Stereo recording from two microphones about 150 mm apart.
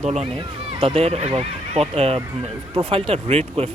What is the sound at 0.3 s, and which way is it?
Speech, 35° right (ahead or behind).